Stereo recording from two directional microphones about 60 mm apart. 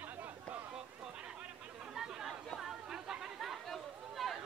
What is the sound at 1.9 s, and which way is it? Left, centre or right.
Chatter, centre.